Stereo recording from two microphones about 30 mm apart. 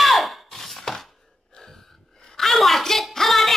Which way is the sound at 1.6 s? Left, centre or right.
Centre.